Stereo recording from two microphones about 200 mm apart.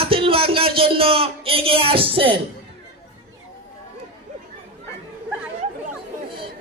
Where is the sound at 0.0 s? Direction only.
25° right (ahead or behind).